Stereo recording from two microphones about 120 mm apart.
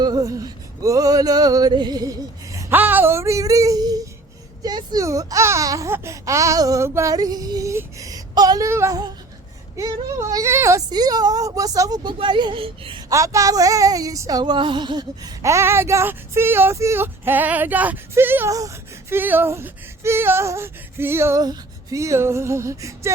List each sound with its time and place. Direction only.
0.0 s male singing: 30° right (ahead or behind)
2.7 s a sound: 15° right (ahead or behind); by 4.0 s 35° right (ahead or behind)
4.6 s speech: 35° right (ahead or behind)
13.1 s speech: 25° right (ahead or behind)
21.4 s speech: 30° right (ahead or behind)